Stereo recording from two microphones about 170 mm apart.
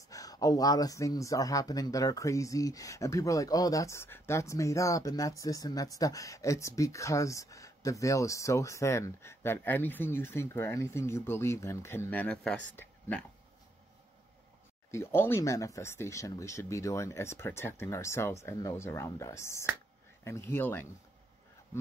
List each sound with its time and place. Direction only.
0.1 s speech: 20° left (ahead or behind)
14.9 s speech: 15° left (ahead or behind)